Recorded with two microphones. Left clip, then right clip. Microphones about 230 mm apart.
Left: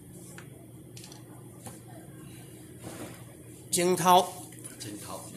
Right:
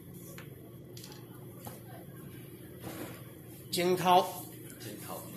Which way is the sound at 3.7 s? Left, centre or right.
Left.